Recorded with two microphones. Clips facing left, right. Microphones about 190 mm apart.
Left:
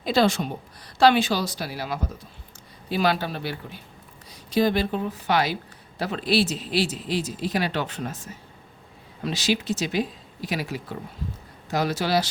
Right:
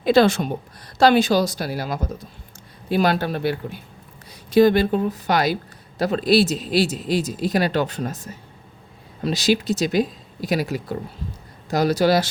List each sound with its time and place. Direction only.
0.0 s a woman's voice: 60° right (ahead or behind)
0.9 s speech: 40° right (ahead or behind)
4.6 s speech: 45° right (ahead or behind)